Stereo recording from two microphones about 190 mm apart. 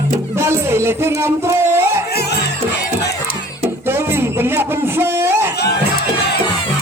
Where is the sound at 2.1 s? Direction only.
60° left (ahead or behind).